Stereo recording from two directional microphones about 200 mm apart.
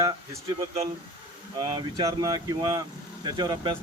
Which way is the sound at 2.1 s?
20° right (ahead or behind).